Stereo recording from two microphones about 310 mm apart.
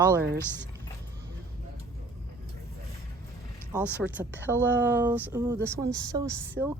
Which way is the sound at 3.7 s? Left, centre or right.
Centre.